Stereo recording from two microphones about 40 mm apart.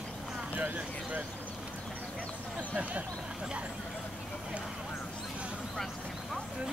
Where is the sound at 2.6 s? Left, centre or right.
Right.